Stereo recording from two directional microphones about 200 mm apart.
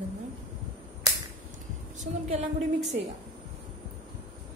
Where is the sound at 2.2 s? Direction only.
35° right (ahead or behind).